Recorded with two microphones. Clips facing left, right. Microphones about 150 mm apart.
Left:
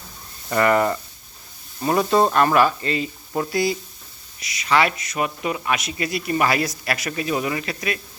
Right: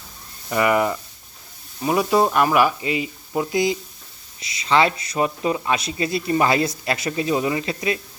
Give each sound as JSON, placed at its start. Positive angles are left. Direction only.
{"t": 0.5, "sound": "a man's voice", "side_deg": -10}